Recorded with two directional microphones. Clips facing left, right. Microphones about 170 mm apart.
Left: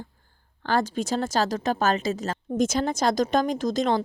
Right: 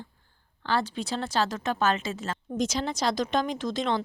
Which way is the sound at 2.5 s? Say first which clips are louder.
Left 5 dB; 50° left (ahead or behind).